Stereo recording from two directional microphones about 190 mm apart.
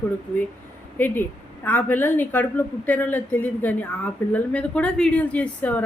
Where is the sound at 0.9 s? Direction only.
10° left (ahead or behind).